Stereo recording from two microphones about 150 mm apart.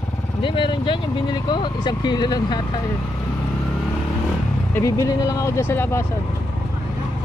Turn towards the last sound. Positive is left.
turn(degrees=15)  # may be behind; listen again after turning